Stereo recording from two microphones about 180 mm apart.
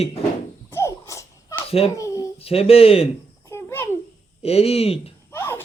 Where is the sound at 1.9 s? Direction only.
20° left (ahead or behind).